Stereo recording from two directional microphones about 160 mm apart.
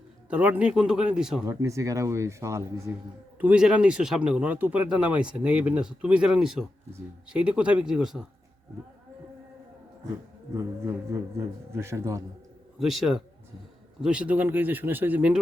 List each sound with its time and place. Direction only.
0.3 s speech: 10° right (ahead or behind)
1.5 s speech: 20° right (ahead or behind)
3.4 s speech: 5° right (ahead or behind)
10.5 s speech: 20° right (ahead or behind)
12.8 s speech: centre (ahead or behind)